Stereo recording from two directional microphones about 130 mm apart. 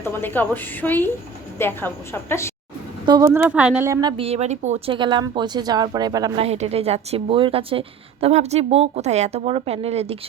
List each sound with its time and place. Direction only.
0.0 s a woman's voice: 15° left (ahead or behind)
3.1 s a woman's voice: 25° right (ahead or behind)
3.5 s a woman's voice: 10° right (ahead or behind)
3.8 s a woman's voice: 25° right (ahead or behind)
4.2 s speech: 55° right (ahead or behind)
4.9 s speech: 35° right (ahead or behind)
6.3 s speech: 50° right (ahead or behind)